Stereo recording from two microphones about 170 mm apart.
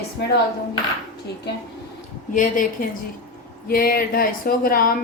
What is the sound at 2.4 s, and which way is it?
A woman's voice, 50° left (ahead or behind).